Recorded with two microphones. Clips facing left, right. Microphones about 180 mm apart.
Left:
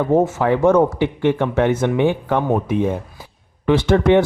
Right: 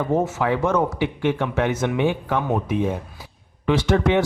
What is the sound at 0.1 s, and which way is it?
Speech, 50° left (ahead or behind).